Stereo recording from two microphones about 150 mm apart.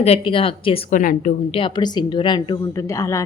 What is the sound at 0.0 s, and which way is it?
Speech, 40° left (ahead or behind).